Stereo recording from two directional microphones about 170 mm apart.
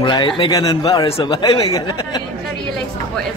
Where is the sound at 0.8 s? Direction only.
35° left (ahead or behind).